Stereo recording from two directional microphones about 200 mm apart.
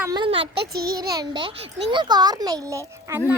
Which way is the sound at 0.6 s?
50° right (ahead or behind).